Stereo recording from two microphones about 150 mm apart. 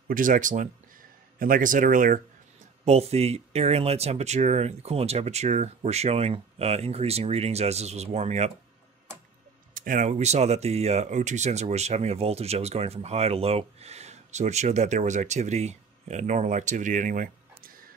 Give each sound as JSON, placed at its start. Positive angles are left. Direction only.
{"t": 0.1, "sound": "speech", "side_deg": -65}
{"t": 2.8, "sound": "speech", "side_deg": -45}
{"t": 9.8, "sound": "speech", "side_deg": -65}